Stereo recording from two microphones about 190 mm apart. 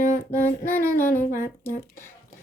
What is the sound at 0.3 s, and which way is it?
Child singing, 10° left (ahead or behind).